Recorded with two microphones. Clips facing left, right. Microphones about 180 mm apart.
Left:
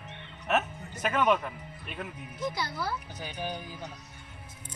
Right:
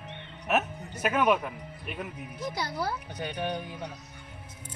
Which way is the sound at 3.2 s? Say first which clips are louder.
Right 4 dB; 65° right (ahead or behind).